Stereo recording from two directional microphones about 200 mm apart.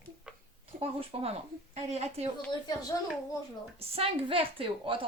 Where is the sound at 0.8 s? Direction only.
30° right (ahead or behind).